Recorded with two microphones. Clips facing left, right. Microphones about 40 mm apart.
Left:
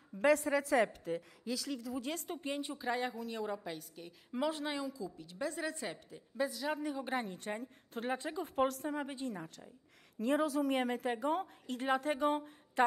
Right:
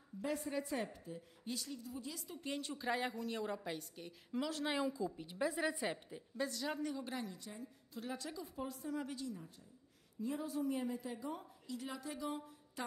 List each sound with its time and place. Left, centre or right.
0.2 s a woman's voice: left
2.1 s speech: left
2.4 s a woman's voice: left
2.8 s a woman's voice: centre
4.3 s a woman's voice: centre
4.7 s a woman's voice: right
6.3 s a woman's voice: centre
7.1 s a woman's voice: left
8.5 s a woman's voice: left
8.9 s a woman's voice: left
10.1 s a woman's voice: left